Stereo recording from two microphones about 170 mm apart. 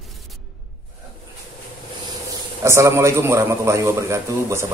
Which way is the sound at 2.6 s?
15° right (ahead or behind).